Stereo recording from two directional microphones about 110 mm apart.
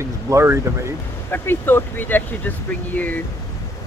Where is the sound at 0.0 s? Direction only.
25° right (ahead or behind).